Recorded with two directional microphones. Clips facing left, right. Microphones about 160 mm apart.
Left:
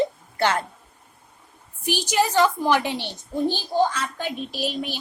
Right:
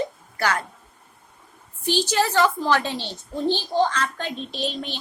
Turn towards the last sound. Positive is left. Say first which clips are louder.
# left 1 dB
turn(degrees=10)  # may be behind; listen again after turning